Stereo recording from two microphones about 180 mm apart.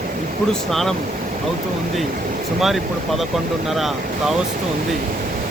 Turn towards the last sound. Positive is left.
turn(degrees=0)  # may be behind; listen again after turning